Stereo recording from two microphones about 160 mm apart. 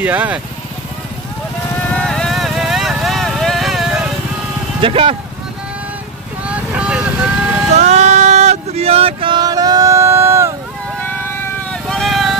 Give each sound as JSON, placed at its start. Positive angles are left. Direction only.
{"t": 0.0, "sound": "speech", "side_deg": -10}
{"t": 1.9, "sound": "vehicle", "side_deg": 5}
{"t": 4.8, "sound": "speech", "side_deg": -35}
{"t": 6.4, "sound": "vehicle", "side_deg": -5}
{"t": 7.7, "sound": "a sound", "side_deg": -45}
{"t": 11.7, "sound": "vehicle", "side_deg": 0}